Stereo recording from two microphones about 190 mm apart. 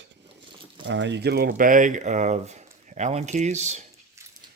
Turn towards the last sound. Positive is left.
turn(degrees=-35)  # may be behind; listen again after turning